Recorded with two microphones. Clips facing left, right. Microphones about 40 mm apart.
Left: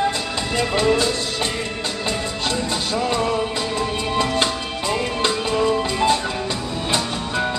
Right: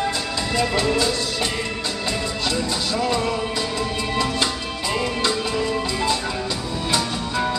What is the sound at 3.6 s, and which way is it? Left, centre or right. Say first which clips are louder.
Music: left 1 dB; left.